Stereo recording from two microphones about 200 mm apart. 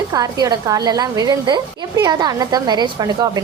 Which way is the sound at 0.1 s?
20° right (ahead or behind).